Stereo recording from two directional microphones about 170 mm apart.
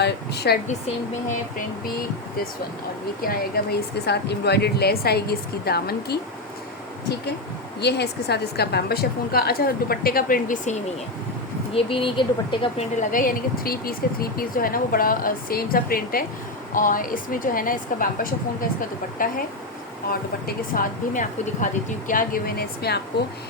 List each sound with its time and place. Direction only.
0.0 s speech: 75° left (ahead or behind)
3.2 s speech: 65° left (ahead or behind)
7.8 s speech: 80° left; by 10.8 s 55° left (ahead or behind)
11.7 s speech: 30° left (ahead or behind)
13.0 s speech: 50° left (ahead or behind)
20.7 s speech: 50° left (ahead or behind); by 23.0 s 65° left (ahead or behind)